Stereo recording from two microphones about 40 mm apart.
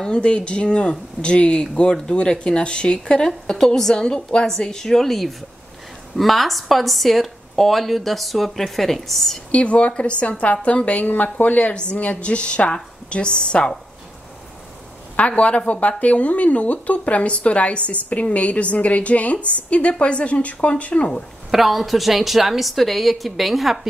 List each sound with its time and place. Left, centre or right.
0.0 s a woman's voice: left; by 9.4 s centre
9.5 s a woman's voice: left
15.1 s speech: left
21.5 s speech: centre